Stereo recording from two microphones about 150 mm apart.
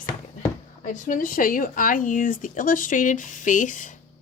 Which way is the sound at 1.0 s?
65° left (ahead or behind).